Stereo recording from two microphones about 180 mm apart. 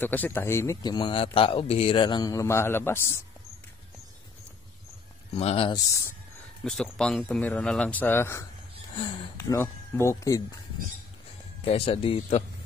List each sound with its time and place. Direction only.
0.0 s speech: 10° left (ahead or behind)
5.3 s speech: 35° left (ahead or behind)
6.6 s speech: 5° left (ahead or behind)
11.6 s speech: 35° left (ahead or behind)